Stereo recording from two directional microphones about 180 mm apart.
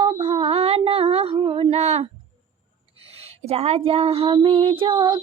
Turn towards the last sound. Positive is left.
turn(degrees=-25)  # may be behind; listen again after turning